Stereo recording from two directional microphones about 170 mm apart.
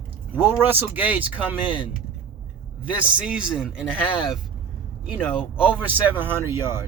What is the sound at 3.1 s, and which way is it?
Speech, 5° right (ahead or behind).